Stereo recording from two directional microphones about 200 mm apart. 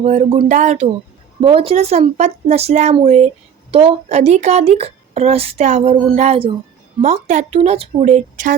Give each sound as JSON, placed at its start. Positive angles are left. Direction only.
{"t": 0.0, "sound": "speech", "side_deg": -35}